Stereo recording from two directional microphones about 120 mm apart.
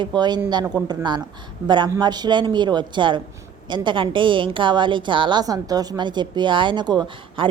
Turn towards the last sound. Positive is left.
turn(degrees=-35)  # may be behind; listen again after turning